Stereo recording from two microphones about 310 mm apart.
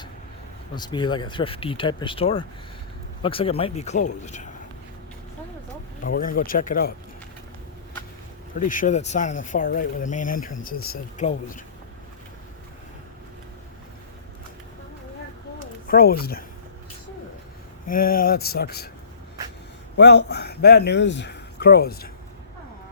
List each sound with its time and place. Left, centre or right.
0.8 s speech: centre
6.0 s speech: left
8.5 s speech: left
15.9 s speech: left
17.8 s speech: left
20.0 s speech: left